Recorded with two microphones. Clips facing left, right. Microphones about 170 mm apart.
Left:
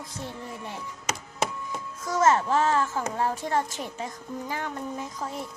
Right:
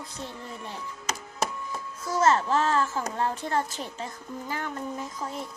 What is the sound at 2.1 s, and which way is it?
A child's voice, 15° left (ahead or behind).